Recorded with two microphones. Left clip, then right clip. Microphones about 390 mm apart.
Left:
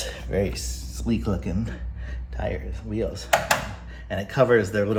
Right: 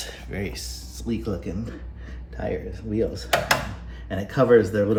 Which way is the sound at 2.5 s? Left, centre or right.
Left.